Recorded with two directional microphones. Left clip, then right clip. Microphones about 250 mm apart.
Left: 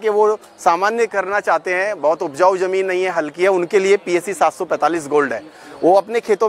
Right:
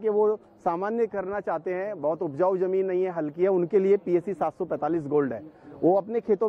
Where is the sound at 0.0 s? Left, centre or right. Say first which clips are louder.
Left 8 dB; centre.